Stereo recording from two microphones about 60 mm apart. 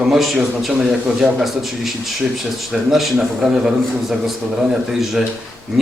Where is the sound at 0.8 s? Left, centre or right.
Centre.